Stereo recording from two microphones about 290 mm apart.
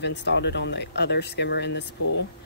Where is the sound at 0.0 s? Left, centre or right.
Left.